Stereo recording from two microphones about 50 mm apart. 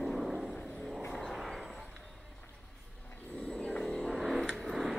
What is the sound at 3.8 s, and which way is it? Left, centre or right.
Vehicle, centre.